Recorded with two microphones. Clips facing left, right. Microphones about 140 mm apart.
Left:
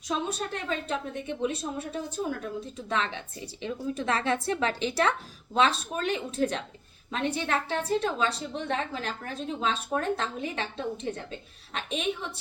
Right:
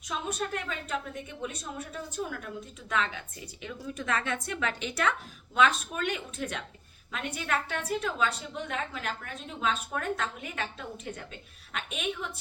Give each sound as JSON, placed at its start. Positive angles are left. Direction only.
{"t": 0.3, "sound": "a woman's voice", "side_deg": 30}